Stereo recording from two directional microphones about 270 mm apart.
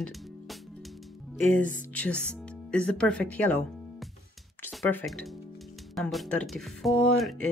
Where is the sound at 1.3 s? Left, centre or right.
Centre.